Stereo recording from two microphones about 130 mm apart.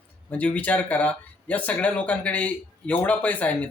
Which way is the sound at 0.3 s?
10° left (ahead or behind).